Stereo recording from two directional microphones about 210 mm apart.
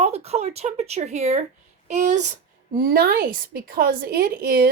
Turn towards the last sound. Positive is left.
turn(degrees=-45)  # may be behind; listen again after turning